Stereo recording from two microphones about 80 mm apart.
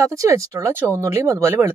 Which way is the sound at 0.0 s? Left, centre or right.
Right.